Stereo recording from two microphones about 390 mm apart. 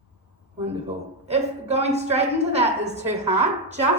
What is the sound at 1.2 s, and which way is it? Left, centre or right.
A woman's voice, centre.